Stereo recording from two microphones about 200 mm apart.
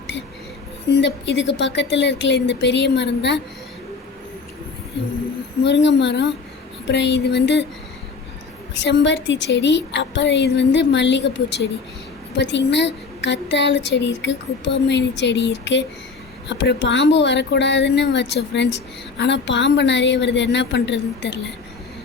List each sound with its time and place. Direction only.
0.9 s a woman's voice: 60° left (ahead or behind)
5.6 s a woman's voice: 60° left (ahead or behind)
8.7 s a woman's voice: 60° left (ahead or behind)